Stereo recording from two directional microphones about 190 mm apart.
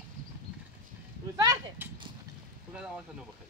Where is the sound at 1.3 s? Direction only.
20° right (ahead or behind).